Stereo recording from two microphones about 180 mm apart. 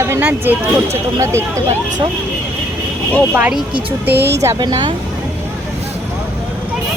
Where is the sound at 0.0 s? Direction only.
15° right (ahead or behind).